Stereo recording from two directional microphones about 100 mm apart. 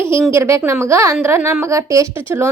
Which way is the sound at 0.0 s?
25° right (ahead or behind).